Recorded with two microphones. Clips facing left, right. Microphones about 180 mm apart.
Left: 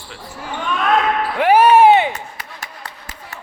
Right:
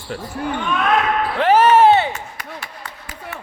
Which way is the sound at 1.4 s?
10° left (ahead or behind).